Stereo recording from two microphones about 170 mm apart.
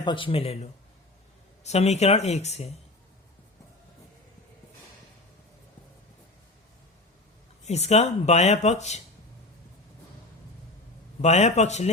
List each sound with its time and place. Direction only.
0.0 s speech: 30° left (ahead or behind)
7.6 s speech: 40° left (ahead or behind)
11.2 s speech: 40° left (ahead or behind)